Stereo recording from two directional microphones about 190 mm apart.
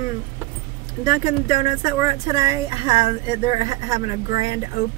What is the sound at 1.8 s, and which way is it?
Speech, 20° right (ahead or behind).